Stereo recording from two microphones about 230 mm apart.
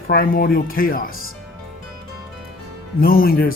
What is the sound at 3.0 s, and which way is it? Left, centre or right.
Speech, left.